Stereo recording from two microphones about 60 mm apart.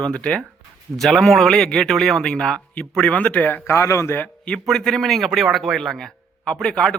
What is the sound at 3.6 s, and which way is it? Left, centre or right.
Speech, left.